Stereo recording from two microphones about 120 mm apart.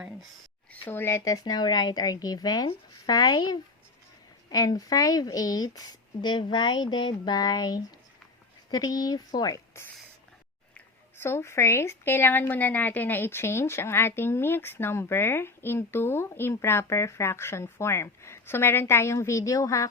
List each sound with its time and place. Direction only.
0.7 s speech: 15° left (ahead or behind)
11.2 s a woman's voice: 20° left (ahead or behind)